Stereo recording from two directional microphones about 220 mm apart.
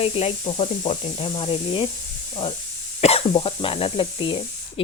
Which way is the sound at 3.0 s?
25° left (ahead or behind).